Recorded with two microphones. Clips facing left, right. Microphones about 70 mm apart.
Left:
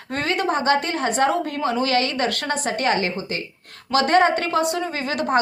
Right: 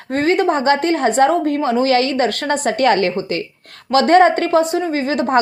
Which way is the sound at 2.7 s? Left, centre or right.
Right.